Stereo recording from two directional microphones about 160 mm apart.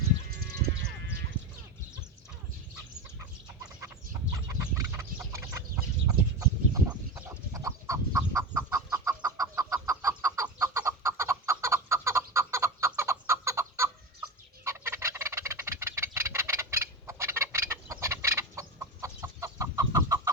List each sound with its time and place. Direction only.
3.2 s chicken: 15° right (ahead or behind)
14.6 s fowl: 15° right (ahead or behind)